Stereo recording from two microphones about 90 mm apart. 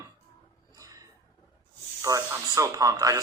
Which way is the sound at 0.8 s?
40° right (ahead or behind).